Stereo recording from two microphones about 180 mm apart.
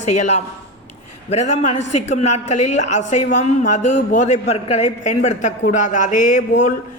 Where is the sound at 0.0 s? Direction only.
40° left (ahead or behind).